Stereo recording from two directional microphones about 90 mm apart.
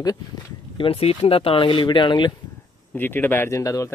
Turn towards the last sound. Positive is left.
turn(degrees=35)  # may be behind; listen again after turning